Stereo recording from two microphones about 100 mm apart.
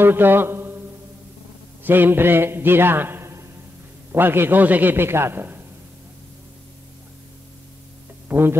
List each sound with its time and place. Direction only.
0.0 s a man's voice: 20° right (ahead or behind)
1.8 s a man's voice: 20° right (ahead or behind)
8.3 s speech: 25° right (ahead or behind)